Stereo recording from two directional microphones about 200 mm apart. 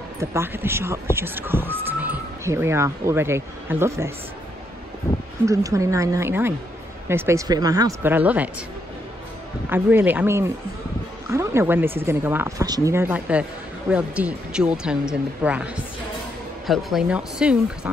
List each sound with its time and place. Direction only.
0.2 s speech: 15° right (ahead or behind)
5.4 s speech: 15° right (ahead or behind)
9.7 s speech: 10° right (ahead or behind)